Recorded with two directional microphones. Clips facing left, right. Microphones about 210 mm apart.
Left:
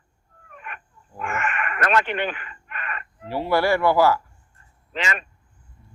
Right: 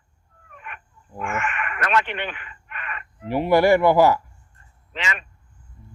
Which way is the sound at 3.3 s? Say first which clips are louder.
Right 4 dB; 15° right (ahead or behind).